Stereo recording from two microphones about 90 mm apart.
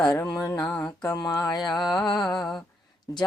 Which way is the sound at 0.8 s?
45° left (ahead or behind).